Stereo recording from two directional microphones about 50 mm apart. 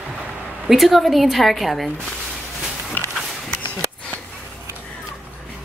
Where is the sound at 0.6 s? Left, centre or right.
Centre.